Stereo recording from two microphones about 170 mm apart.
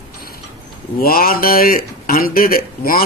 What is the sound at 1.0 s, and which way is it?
Speech, 60° left (ahead or behind).